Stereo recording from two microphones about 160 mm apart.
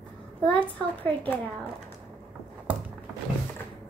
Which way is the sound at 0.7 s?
10° left (ahead or behind).